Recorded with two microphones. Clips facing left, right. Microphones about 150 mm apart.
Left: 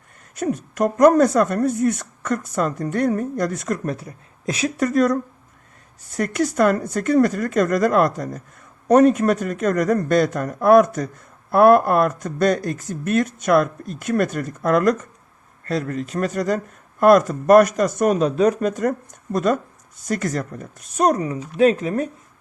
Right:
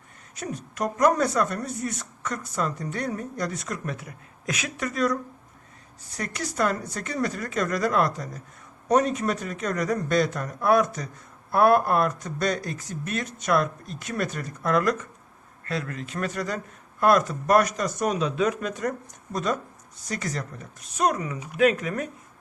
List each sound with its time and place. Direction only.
0.3 s a woman's voice: 50° left (ahead or behind)
3.9 s a woman's voice: 35° left (ahead or behind)
21.3 s speech: 10° right (ahead or behind)
21.6 s speech: 30° left (ahead or behind)